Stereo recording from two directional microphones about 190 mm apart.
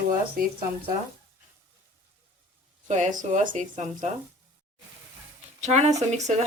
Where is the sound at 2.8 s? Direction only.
40° right (ahead or behind).